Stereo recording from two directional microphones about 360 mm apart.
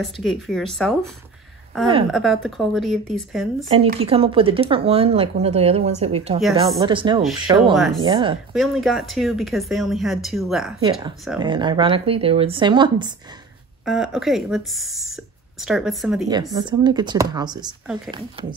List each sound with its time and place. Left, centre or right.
0.0 s speech: centre
2.0 s speech: centre
3.7 s speech: centre
7.7 s speech: centre
8.0 s speech: centre
8.5 s speech: centre
10.8 s speech: centre
13.8 s speech: centre
16.5 s speech: centre